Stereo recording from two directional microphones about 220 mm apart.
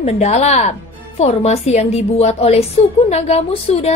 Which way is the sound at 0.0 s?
30° left (ahead or behind).